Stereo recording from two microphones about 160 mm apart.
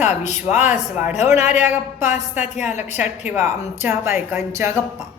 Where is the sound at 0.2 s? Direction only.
45° left (ahead or behind).